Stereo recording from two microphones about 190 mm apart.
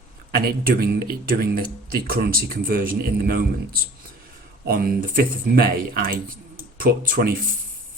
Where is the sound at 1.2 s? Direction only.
50° right (ahead or behind).